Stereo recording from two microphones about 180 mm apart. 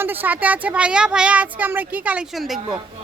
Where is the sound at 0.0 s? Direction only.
10° right (ahead or behind).